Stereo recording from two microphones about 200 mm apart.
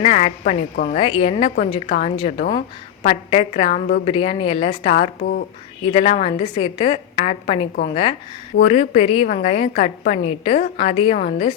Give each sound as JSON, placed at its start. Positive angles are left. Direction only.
{"t": 0.0, "sound": "a woman's voice", "side_deg": 30}